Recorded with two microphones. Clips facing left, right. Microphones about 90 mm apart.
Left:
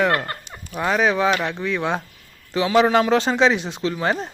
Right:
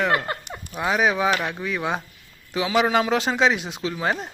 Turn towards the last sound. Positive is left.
turn(degrees=0)  # may be behind; listen again after turning